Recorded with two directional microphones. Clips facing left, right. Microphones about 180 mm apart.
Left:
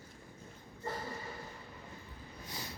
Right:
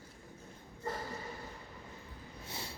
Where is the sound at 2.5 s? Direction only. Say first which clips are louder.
Right 1 dB; 25° right (ahead or behind).